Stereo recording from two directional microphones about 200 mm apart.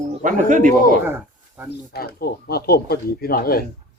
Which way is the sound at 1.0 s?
10° right (ahead or behind).